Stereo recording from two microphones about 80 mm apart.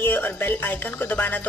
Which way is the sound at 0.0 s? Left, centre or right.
Left.